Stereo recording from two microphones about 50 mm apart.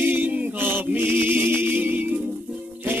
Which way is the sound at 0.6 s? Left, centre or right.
Right.